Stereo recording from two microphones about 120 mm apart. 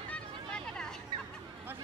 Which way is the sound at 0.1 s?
5° left (ahead or behind).